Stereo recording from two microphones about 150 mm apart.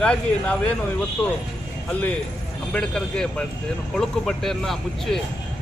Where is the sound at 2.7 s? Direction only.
5° left (ahead or behind).